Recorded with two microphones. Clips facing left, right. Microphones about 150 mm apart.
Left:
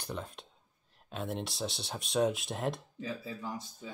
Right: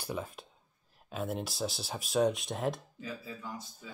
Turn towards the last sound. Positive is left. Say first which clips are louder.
# left 3 dB
turn(degrees=30)  # may be behind; listen again after turning